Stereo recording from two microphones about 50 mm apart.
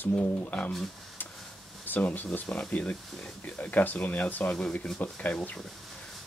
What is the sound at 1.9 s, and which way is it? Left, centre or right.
Speech, left.